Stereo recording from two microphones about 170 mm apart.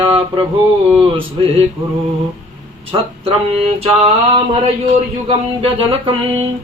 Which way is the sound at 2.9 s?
30° right (ahead or behind).